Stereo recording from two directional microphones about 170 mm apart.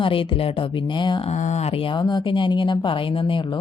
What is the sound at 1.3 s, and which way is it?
A woman's voice, 45° left (ahead or behind).